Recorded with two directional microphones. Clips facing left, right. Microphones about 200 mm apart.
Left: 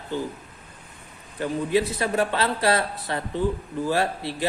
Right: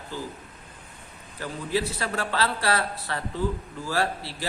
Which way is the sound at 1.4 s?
20° left (ahead or behind).